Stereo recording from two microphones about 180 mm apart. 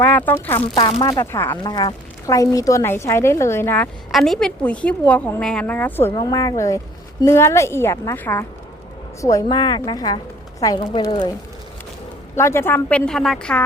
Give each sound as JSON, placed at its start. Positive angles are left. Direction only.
{"t": 0.0, "sound": "speech", "side_deg": 10}
{"t": 0.8, "sound": "a woman's voice", "side_deg": 30}
{"t": 1.0, "sound": "a woman's voice", "side_deg": 15}
{"t": 4.1, "sound": "a woman's voice", "side_deg": 0}
{"t": 12.4, "sound": "a woman's voice", "side_deg": 15}